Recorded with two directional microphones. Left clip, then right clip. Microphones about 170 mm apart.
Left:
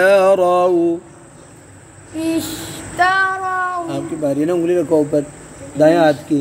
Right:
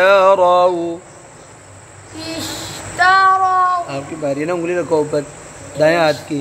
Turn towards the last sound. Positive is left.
turn(degrees=25)  # may be behind; listen again after turning